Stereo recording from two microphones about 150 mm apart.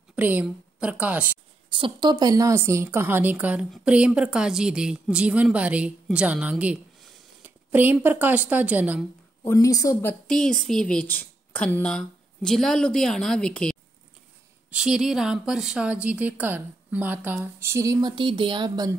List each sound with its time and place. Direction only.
0.1 s a woman's voice: 10° right (ahead or behind)
1.7 s a woman's voice: 35° right (ahead or behind); by 9.0 s 10° right (ahead or behind)
9.5 s a woman's voice: 20° left (ahead or behind)
10.2 s speech: 5° left (ahead or behind)
14.7 s a woman's voice: 5° right (ahead or behind)
18.0 s speech: 30° right (ahead or behind)